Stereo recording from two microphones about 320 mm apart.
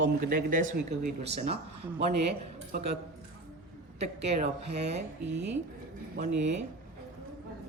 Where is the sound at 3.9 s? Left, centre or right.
Centre.